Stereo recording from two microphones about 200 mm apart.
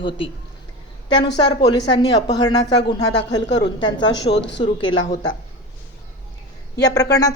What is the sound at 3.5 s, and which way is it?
Speech, 60° left (ahead or behind).